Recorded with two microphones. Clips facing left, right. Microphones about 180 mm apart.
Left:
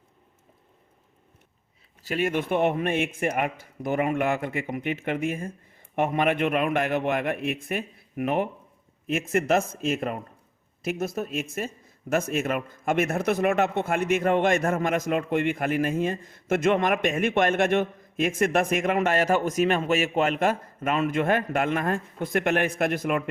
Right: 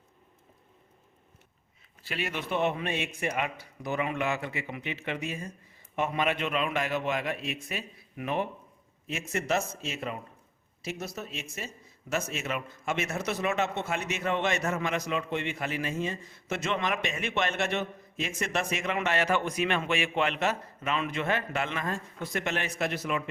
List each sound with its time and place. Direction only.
2.0 s a man's voice: 50° left (ahead or behind)